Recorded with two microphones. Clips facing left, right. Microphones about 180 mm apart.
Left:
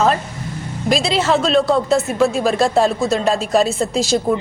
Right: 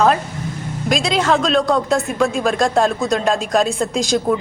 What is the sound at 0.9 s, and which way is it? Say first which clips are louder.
Speech: left 1 dB; 5° left (ahead or behind).